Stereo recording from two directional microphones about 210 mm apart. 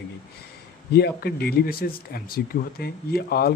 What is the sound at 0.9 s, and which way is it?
Speech, 50° left (ahead or behind).